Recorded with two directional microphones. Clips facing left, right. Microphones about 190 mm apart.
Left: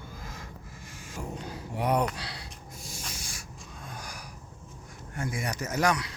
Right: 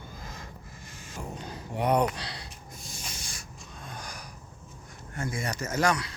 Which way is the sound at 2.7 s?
10° left (ahead or behind).